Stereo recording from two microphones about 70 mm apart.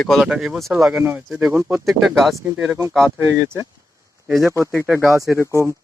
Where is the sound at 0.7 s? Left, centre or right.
Centre.